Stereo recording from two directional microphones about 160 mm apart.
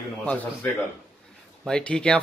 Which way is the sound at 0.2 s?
10° left (ahead or behind).